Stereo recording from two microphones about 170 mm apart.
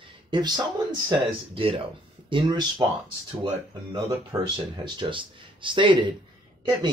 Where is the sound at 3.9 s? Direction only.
25° right (ahead or behind).